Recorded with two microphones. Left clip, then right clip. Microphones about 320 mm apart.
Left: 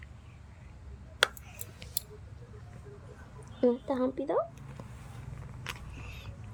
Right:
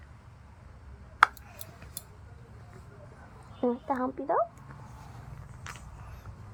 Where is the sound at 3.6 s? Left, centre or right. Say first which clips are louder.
Left 1 dB; centre.